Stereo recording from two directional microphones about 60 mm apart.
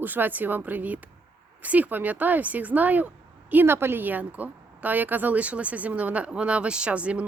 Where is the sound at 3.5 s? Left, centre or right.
Right.